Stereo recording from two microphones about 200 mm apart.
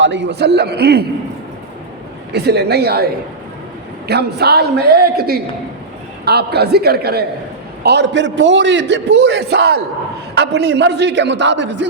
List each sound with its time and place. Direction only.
0.0 s a man's voice: 60° right (ahead or behind)
2.3 s a man's voice: 55° right (ahead or behind)